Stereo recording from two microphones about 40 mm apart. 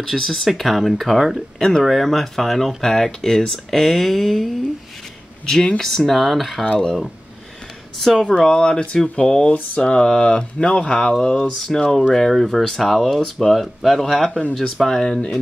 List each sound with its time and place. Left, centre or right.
0.0 s speech: centre
5.8 s speech: centre
8.0 s speech: centre
8.3 s speech: centre